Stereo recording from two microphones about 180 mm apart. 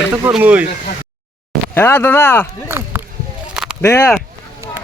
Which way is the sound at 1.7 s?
10° left (ahead or behind).